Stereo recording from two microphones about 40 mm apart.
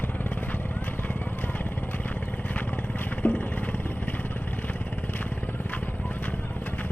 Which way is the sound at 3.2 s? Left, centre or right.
Left.